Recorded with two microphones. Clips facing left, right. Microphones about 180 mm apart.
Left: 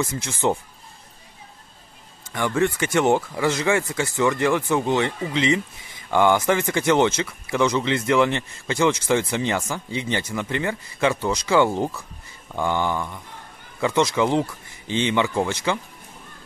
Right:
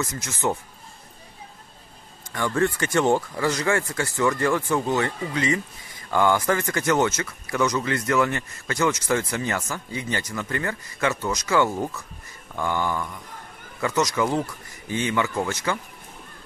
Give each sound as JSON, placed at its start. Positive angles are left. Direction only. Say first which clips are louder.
{"t": 0.0, "sound": "speech", "louder": "left 3 dB", "side_deg": 30}
{"t": 2.3, "sound": "speech", "louder": "left 1 dB", "side_deg": 15}
{"t": 10.5, "sound": "speech", "louder": "left 3 dB", "side_deg": 15}
{"t": 11.0, "sound": "speech", "louder": "left 3 dB", "side_deg": 25}